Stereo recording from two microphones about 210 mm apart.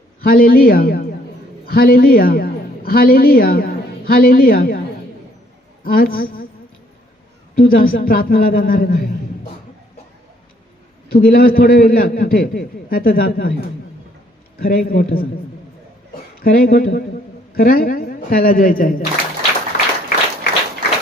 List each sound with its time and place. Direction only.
0.2 s a man's voice: 45° left (ahead or behind)
5.8 s a man's voice: 45° left (ahead or behind)
7.6 s a man's voice: 45° left (ahead or behind)
11.1 s a man's voice: 45° left (ahead or behind)
14.6 s a man's voice: 45° left (ahead or behind)
16.4 s a man's voice: 45° left (ahead or behind)
17.5 s a sound: 45° left (ahead or behind)